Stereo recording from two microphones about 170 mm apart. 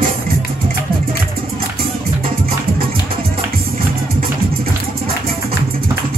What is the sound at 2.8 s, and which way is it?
Music, 60° right (ahead or behind).